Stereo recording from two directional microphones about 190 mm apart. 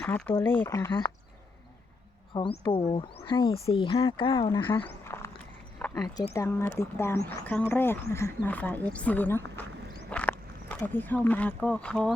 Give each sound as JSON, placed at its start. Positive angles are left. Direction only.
{"t": 0.0, "sound": "speech", "side_deg": 10}
{"t": 2.3, "sound": "speech", "side_deg": 15}
{"t": 2.6, "sound": "speech", "side_deg": 25}
{"t": 4.6, "sound": "speech", "side_deg": 10}
{"t": 5.8, "sound": "a sound", "side_deg": 5}
{"t": 6.3, "sound": "speech", "side_deg": 15}